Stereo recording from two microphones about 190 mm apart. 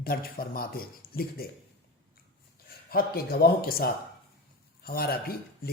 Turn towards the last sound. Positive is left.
turn(degrees=55)  # may be behind; listen again after turning